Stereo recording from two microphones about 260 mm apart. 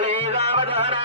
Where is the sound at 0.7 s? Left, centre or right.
Right.